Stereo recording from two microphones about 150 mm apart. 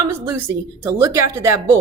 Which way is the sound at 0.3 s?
15° right (ahead or behind).